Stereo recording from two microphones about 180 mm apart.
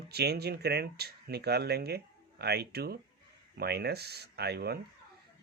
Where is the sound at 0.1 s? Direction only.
65° right (ahead or behind).